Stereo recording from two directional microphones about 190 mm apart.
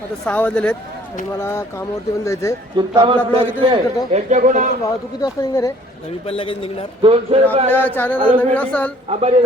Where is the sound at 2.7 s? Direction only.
25° right (ahead or behind).